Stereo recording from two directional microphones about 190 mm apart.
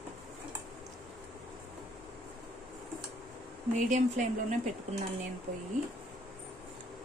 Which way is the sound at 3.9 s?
40° right (ahead or behind).